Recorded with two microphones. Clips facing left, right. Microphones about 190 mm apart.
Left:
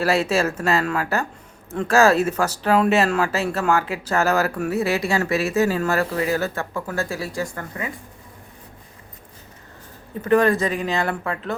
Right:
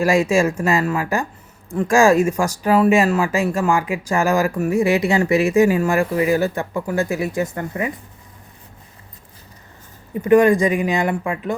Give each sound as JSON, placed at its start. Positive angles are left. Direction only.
{"t": 0.0, "sound": "speech", "side_deg": -10}
{"t": 10.2, "sound": "speech", "side_deg": -15}